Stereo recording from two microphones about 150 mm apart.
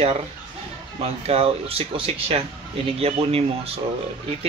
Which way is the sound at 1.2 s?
40° right (ahead or behind).